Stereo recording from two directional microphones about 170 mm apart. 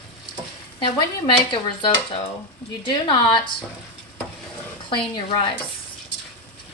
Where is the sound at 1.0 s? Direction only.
30° left (ahead or behind).